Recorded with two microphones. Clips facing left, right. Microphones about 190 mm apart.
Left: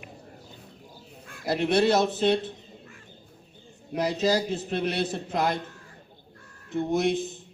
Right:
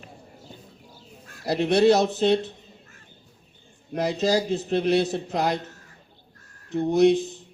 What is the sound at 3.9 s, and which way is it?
Speech, 50° right (ahead or behind).